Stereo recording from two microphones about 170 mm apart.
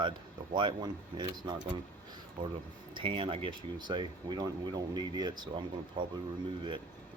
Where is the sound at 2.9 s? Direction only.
30° right (ahead or behind).